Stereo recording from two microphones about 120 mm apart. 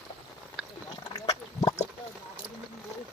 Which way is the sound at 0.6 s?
5° left (ahead or behind).